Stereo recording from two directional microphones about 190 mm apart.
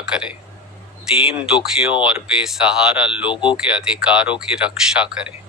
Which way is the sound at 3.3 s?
25° left (ahead or behind).